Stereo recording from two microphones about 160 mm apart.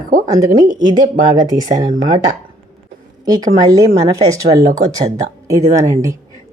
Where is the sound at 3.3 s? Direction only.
25° right (ahead or behind).